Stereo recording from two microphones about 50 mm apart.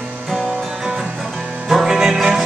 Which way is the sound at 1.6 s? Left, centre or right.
Centre.